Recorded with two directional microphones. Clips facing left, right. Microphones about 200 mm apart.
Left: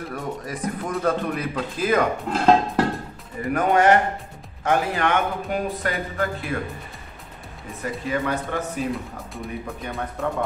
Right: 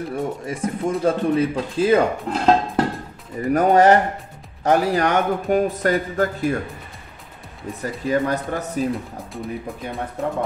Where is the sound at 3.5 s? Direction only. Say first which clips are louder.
Right 4 dB; 35° right (ahead or behind).